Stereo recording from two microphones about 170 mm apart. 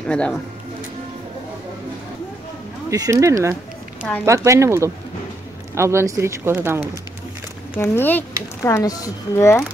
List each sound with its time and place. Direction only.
0.1 s speech: 5° left (ahead or behind)
2.9 s speech: 15° right (ahead or behind)
7.7 s speech: 10° left (ahead or behind)